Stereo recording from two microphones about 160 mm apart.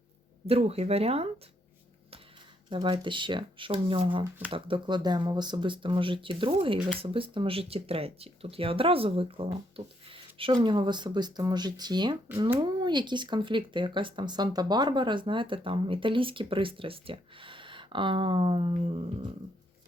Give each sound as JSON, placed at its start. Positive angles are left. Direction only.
{"t": 0.4, "sound": "speech", "side_deg": -40}
{"t": 2.6, "sound": "speech", "side_deg": -30}
{"t": 4.2, "sound": "speech", "side_deg": -10}
{"t": 4.5, "sound": "speech", "side_deg": -30}